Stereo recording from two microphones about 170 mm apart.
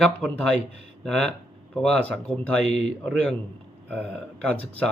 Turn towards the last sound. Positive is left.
turn(degrees=10)  # may be behind; listen again after turning